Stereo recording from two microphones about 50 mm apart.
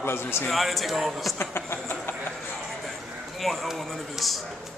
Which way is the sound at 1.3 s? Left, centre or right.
Left.